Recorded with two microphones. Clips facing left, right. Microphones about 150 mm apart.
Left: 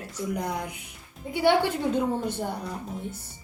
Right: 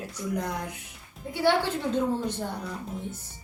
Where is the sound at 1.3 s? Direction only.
15° left (ahead or behind).